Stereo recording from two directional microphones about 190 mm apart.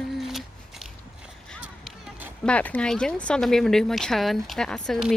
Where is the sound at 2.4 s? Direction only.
5° left (ahead or behind).